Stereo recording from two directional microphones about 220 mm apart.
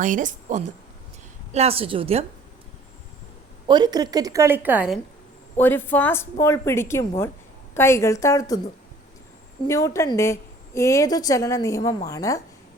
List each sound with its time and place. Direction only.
0.0 s a woman's voice: 35° right (ahead or behind)
3.7 s a woman's voice: 20° right (ahead or behind)
5.5 s a woman's voice: 10° left (ahead or behind)
9.6 s a woman's voice: 15° left (ahead or behind)